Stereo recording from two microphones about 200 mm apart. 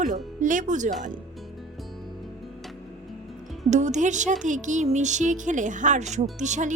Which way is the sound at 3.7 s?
35° right (ahead or behind).